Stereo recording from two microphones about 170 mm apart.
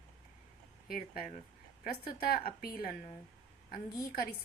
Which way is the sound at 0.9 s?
55° left (ahead or behind).